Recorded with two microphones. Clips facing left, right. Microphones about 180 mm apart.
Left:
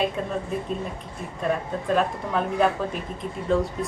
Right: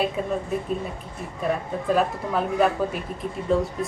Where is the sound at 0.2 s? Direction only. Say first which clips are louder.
Right 2 dB; 5° right (ahead or behind).